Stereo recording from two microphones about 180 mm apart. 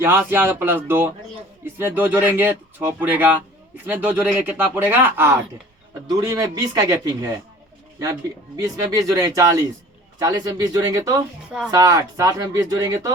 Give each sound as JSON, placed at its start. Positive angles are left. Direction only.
{"t": 0.0, "sound": "a man's voice", "side_deg": -10}
{"t": 8.5, "sound": "a man's voice", "side_deg": -20}